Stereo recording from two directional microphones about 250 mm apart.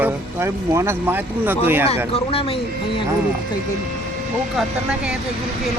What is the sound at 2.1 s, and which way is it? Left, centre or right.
Speech, left.